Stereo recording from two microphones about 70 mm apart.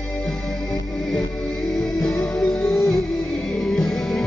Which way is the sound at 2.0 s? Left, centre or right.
Centre.